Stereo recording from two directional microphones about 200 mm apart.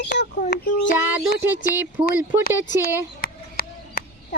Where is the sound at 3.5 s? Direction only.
50° left (ahead or behind).